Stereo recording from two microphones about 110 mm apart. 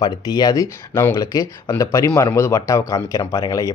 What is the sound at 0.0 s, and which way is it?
Speech, 35° left (ahead or behind).